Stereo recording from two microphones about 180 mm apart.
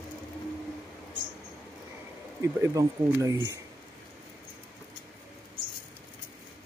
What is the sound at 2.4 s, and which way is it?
Speech, 15° right (ahead or behind).